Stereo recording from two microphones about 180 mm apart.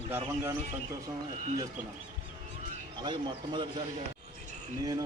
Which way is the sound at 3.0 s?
25° right (ahead or behind).